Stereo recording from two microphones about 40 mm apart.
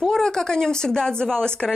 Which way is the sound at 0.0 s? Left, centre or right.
Centre.